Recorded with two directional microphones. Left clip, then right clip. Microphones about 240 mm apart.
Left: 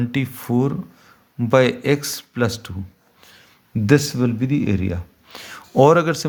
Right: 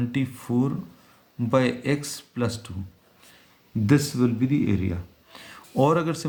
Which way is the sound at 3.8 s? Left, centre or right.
Left.